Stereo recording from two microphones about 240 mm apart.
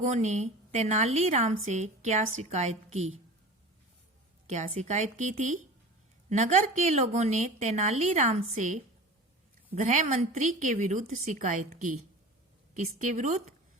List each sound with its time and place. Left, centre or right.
0.0 s a woman's voice: right
4.4 s a woman's voice: right